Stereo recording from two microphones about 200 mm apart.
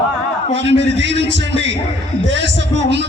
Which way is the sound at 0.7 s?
60° right (ahead or behind).